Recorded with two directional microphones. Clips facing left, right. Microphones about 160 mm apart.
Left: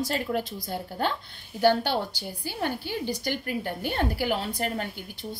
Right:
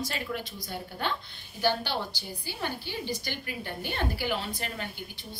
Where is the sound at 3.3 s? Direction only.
45° left (ahead or behind).